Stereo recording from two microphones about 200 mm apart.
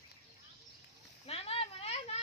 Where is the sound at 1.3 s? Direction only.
30° left (ahead or behind).